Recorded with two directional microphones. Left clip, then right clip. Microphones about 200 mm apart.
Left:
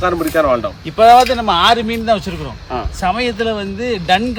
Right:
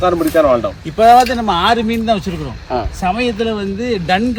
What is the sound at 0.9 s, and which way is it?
Speech, 20° left (ahead or behind).